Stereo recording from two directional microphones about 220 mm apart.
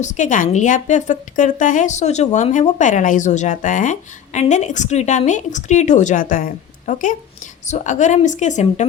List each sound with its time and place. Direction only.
0.0 s a woman's voice: 35° left (ahead or behind)